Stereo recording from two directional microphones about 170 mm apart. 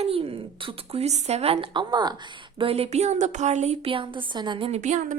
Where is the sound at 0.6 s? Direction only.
40° right (ahead or behind).